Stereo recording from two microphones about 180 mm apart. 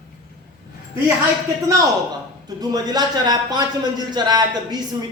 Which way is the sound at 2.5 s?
20° right (ahead or behind).